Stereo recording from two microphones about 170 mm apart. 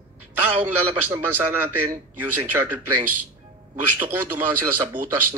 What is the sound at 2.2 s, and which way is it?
Speech, 10° right (ahead or behind).